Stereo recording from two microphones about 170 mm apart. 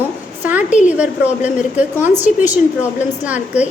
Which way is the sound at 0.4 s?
10° right (ahead or behind).